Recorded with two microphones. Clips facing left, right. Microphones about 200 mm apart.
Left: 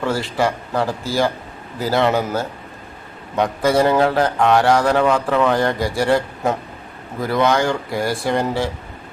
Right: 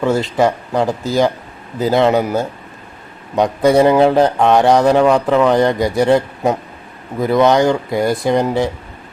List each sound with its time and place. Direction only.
0.0 s speech: 20° right (ahead or behind)